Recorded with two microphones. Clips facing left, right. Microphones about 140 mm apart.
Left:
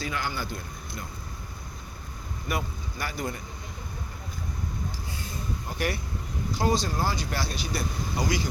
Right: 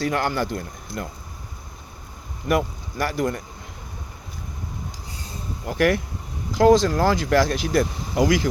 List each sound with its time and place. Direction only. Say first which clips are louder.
0.0 s speech: right 9 dB; 70° right (ahead or behind)
1.0 s speech: right 10 dB; 65° right (ahead or behind)
2.5 s speech: right 10 dB; 75° right (ahead or behind)
5.6 s speech: right 12 dB; 90° right